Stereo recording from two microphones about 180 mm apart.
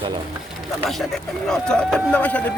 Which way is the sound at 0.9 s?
Centre (ahead or behind).